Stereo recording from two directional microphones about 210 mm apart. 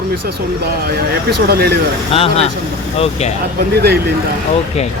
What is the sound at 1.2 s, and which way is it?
Speech, 50° right (ahead or behind).